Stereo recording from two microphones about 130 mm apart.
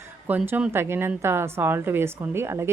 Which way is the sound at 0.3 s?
15° right (ahead or behind).